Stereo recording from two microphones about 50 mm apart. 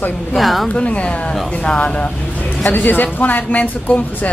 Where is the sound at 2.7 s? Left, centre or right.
Left.